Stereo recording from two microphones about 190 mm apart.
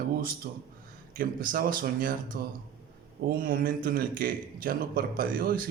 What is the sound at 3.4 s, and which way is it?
A man's voice, 45° right (ahead or behind).